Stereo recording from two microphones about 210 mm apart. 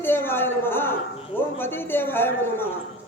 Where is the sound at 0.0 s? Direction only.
10° left (ahead or behind).